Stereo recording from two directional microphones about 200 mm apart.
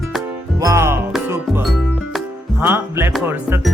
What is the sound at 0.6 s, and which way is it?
Music, 15° right (ahead or behind).